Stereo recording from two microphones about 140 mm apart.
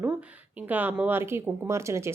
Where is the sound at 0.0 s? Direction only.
10° right (ahead or behind).